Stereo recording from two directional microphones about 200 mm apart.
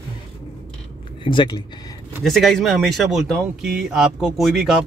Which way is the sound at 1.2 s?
25° left (ahead or behind).